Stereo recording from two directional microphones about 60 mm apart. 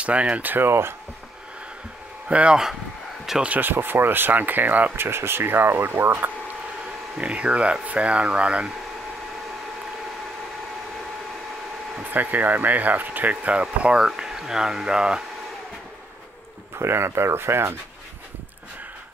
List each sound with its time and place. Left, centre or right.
0.0 s speech: centre
0.4 s speech: right
2.2 s speech: centre
3.4 s speech: right
7.2 s speech: right
12.0 s speech: right; by 15.2 s centre
16.7 s speech: right